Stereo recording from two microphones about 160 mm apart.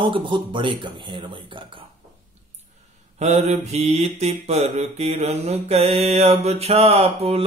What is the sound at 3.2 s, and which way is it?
Mantra, 40° right (ahead or behind).